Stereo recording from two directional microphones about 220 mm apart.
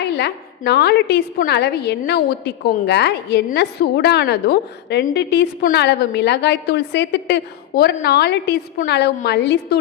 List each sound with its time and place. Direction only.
0.0 s a woman's voice: 50° left (ahead or behind)